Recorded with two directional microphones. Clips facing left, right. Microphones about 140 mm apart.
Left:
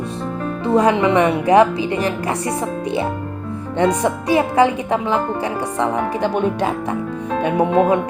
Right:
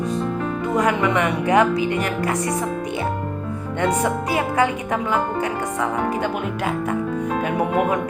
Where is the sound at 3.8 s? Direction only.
35° left (ahead or behind).